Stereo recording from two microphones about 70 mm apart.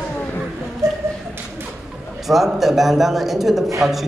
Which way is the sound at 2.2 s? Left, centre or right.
Centre.